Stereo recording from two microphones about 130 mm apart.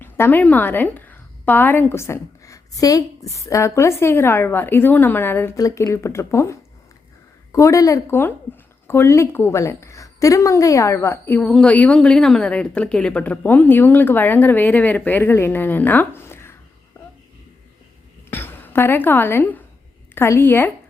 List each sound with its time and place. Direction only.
0.0 s a woman's voice: 15° left (ahead or behind)
18.3 s a sound: 15° left (ahead or behind)
20.1 s a woman's voice: 20° left (ahead or behind)